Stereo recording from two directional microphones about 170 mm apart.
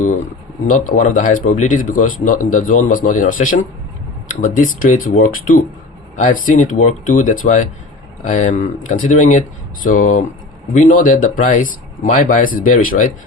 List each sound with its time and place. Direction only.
0.7 s speech: 50° left (ahead or behind)